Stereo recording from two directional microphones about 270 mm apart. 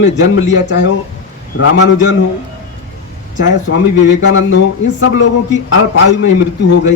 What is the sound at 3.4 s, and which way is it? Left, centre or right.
Speech, left.